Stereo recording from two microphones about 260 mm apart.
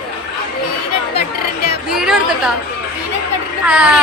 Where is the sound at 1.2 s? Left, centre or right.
Left.